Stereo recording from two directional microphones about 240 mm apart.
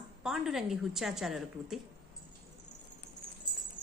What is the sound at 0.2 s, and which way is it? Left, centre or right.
Jingle bell, centre.